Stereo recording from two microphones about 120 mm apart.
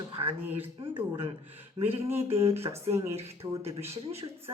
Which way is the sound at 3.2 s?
60° right (ahead or behind).